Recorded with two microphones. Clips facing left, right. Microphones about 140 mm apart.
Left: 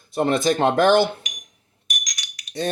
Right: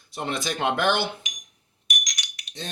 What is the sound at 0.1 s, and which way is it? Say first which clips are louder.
Speech: left 10 dB; 50° left (ahead or behind).